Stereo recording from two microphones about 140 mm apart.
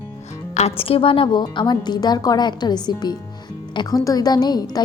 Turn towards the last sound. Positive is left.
turn(degrees=30)  # may be behind; listen again after turning